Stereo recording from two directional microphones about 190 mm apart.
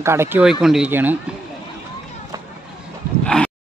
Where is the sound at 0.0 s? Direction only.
15° right (ahead or behind).